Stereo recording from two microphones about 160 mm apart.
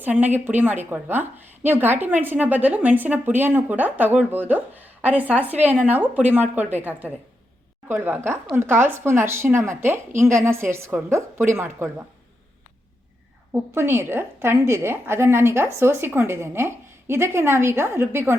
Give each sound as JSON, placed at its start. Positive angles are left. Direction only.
{"t": 0.0, "sound": "a woman's voice", "side_deg": -10}
{"t": 13.5, "sound": "a woman's voice", "side_deg": -15}